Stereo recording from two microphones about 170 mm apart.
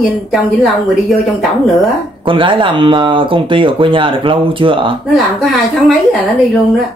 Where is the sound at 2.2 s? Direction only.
30° right (ahead or behind).